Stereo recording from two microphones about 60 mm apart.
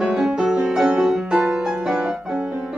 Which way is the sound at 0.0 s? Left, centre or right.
Centre.